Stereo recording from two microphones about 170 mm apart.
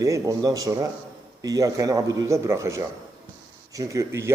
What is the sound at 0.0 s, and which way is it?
A man's voice, 20° right (ahead or behind).